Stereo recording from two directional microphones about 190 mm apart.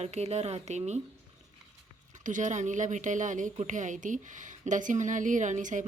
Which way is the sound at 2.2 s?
40° right (ahead or behind).